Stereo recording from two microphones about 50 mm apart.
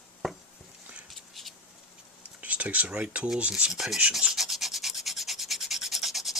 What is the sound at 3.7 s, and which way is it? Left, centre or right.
Rub, centre.